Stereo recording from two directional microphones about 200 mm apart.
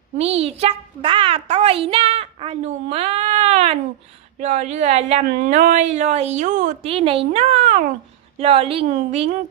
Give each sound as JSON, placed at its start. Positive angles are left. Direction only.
{"t": 0.2, "sound": "a child's voice", "side_deg": -30}